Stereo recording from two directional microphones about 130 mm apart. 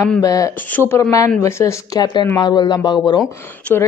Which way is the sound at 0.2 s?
25° left (ahead or behind).